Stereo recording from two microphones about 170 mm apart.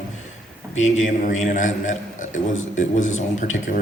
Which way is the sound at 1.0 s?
45° left (ahead or behind).